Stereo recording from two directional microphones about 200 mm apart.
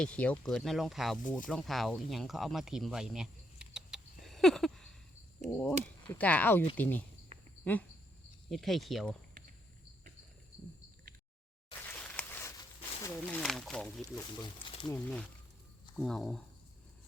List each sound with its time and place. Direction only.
0.0 s speech: 5° left (ahead or behind)
11.9 s a sound: 5° left (ahead or behind)
13.4 s speech: 5° left (ahead or behind)
14.2 s speech: 25° left (ahead or behind)
14.8 s speech: 5° left (ahead or behind)